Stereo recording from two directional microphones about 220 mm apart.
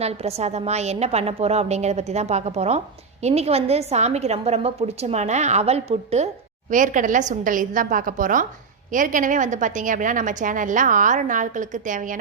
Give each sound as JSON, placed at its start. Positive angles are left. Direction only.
{"t": 0.0, "sound": "a woman's voice", "side_deg": -30}